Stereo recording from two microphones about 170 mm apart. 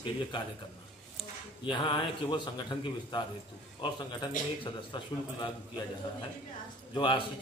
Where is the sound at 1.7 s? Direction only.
30° left (ahead or behind).